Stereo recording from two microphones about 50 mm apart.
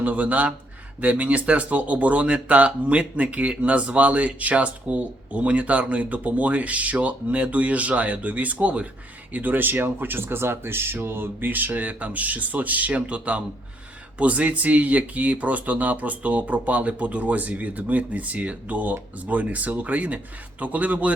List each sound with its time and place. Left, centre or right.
0.0 s speech: right